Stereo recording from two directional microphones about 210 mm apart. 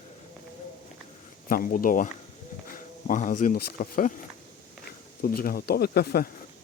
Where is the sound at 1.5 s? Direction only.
45° left (ahead or behind).